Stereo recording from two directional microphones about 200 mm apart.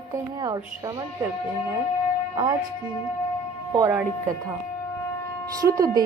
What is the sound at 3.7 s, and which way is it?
Speech, 15° right (ahead or behind).